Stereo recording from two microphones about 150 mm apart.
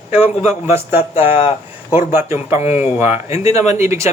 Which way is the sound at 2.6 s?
45° left (ahead or behind).